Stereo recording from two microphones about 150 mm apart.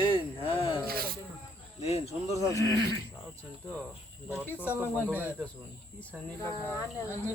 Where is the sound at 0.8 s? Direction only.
90° right.